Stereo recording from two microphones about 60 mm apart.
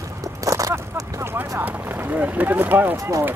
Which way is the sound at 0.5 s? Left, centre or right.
Right.